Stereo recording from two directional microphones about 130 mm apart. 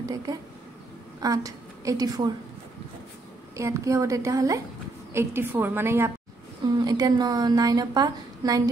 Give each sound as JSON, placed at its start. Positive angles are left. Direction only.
{"t": 1.2, "sound": "a woman's voice", "side_deg": -25}
{"t": 3.5, "sound": "a woman's voice", "side_deg": -25}
{"t": 6.8, "sound": "a woman's voice", "side_deg": -30}